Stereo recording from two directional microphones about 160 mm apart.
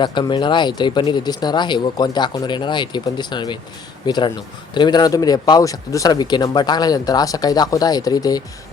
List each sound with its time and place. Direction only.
0.0 s speech: 30° left (ahead or behind)